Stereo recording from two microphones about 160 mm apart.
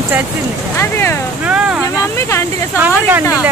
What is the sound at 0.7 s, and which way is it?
Speech, 15° left (ahead or behind).